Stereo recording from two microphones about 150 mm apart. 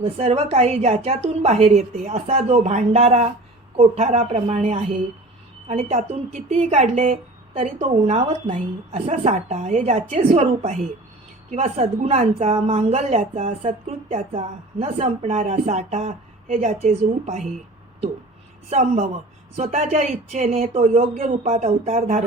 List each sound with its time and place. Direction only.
0.0 s a woman's voice: 40° right (ahead or behind)
7.6 s a woman's voice: 45° right (ahead or behind)
18.7 s a woman's voice: 50° right (ahead or behind)